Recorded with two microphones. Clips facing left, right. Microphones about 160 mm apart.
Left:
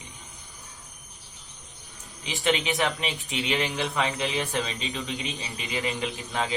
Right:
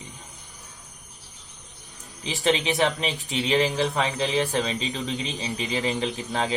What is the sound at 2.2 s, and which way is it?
A man's voice, 35° right (ahead or behind).